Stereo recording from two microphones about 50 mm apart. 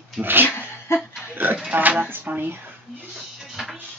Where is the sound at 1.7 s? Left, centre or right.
Right.